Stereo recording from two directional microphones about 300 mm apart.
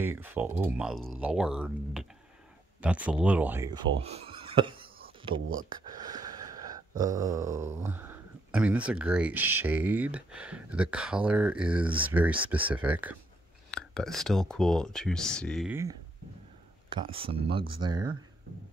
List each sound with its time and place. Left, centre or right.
0.0 s speech: centre
4.0 s a sound: centre
7.0 s speech: centre